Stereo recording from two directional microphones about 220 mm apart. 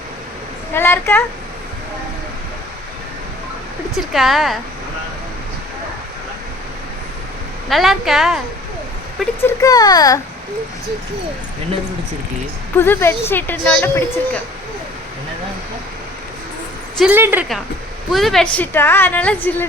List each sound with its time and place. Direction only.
0.7 s a woman's voice: 10° left (ahead or behind)
3.9 s speech: centre (ahead or behind)
7.7 s speech: centre (ahead or behind)
9.1 s a woman's voice: 10° left (ahead or behind)
12.7 s a woman's voice: 10° left (ahead or behind)
17.0 s a woman's voice: 10° right (ahead or behind)